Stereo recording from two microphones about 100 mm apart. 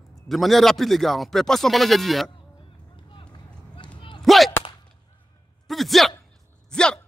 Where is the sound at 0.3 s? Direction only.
Centre (ahead or behind).